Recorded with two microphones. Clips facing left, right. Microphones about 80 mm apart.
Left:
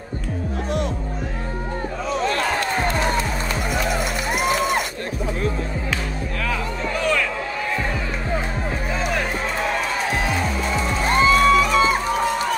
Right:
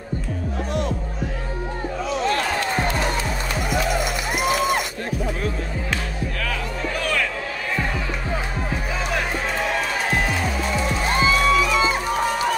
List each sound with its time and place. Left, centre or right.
11.1 s music: left